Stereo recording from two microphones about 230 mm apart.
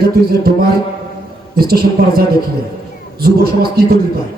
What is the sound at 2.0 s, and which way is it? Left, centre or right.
Speech, right.